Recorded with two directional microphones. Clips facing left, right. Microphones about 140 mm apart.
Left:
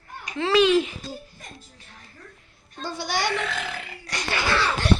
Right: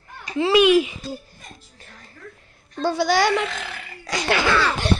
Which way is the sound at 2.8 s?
85° right.